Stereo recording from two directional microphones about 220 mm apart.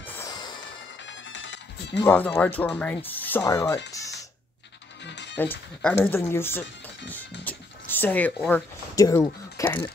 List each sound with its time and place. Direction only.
0.0 s music: 10° left (ahead or behind)
1.0 s music: 55° left (ahead or behind)
2.0 s speech: 10° left (ahead or behind)
5.0 s music: 50° left (ahead or behind)
5.4 s speech: 5° left (ahead or behind)
7.4 s a sound: 10° left (ahead or behind)